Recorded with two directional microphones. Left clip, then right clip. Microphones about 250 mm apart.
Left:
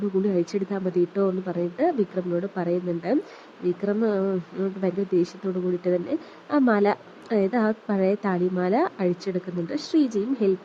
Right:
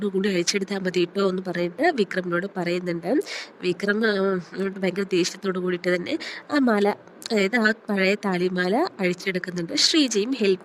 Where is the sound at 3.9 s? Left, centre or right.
Right.